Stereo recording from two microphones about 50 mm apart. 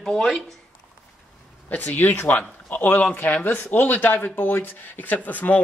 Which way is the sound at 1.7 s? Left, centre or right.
Left.